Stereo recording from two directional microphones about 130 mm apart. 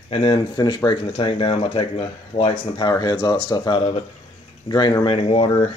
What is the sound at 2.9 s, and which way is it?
Speech, 30° left (ahead or behind).